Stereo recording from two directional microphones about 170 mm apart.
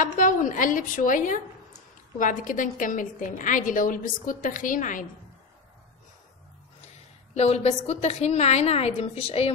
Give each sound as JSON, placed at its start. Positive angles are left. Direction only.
{"t": 0.0, "sound": "a woman's voice", "side_deg": 50}
{"t": 7.3, "sound": "a woman's voice", "side_deg": 40}